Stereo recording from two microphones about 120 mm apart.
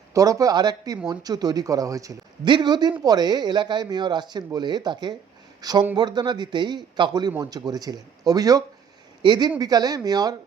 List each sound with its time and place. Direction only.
0.1 s a man's voice: 30° right (ahead or behind)